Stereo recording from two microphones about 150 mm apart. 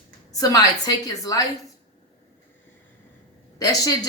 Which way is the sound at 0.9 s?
25° left (ahead or behind).